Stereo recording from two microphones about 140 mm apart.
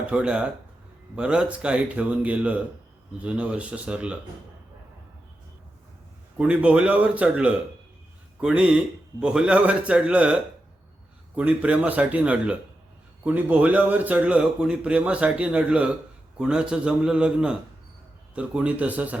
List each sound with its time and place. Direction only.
0.1 s a man's voice: 5° right (ahead or behind)
6.3 s a man's voice: 5° right (ahead or behind)